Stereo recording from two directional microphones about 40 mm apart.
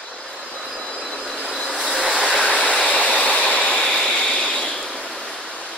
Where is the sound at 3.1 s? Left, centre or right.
Left.